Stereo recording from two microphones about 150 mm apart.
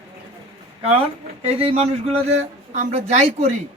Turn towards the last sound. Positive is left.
turn(degrees=-45)  # may be behind; listen again after turning